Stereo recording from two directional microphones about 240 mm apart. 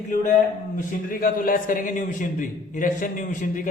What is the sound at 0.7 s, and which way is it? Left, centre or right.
A man's voice, left.